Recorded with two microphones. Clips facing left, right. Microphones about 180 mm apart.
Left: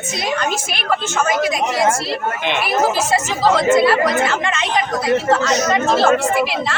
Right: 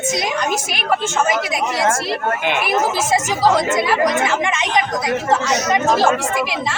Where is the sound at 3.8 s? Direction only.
15° right (ahead or behind).